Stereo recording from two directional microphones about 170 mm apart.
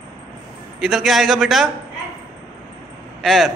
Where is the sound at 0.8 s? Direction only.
Centre (ahead or behind).